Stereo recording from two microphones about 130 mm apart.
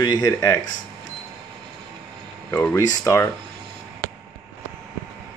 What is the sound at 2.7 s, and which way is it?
Speech, 25° left (ahead or behind).